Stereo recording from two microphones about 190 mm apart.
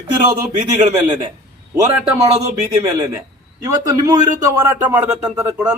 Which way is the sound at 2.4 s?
15° right (ahead or behind).